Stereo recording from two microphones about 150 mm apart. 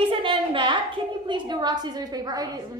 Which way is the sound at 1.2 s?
30° right (ahead or behind).